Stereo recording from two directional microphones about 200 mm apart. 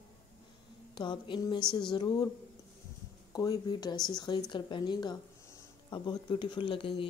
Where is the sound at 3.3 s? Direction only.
20° left (ahead or behind).